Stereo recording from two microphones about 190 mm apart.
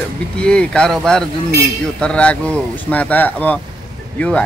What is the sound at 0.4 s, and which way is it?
Speech, 5° left (ahead or behind).